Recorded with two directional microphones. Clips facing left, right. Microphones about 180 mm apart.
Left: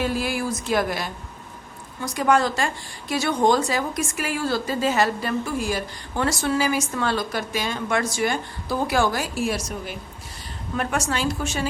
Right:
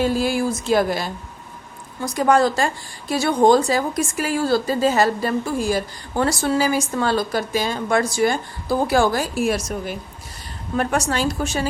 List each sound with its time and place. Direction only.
0.0 s a woman's voice: 30° right (ahead or behind)
10.8 s a woman's voice: 40° right (ahead or behind)